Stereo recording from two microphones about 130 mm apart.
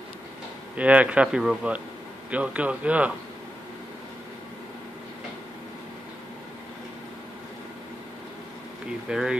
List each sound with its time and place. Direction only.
0.7 s speech: 10° right (ahead or behind)
9.1 s speech: 5° right (ahead or behind)